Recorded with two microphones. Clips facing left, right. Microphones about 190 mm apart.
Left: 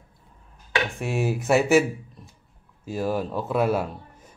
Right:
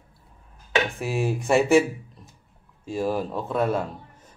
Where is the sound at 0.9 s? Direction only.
Centre (ahead or behind).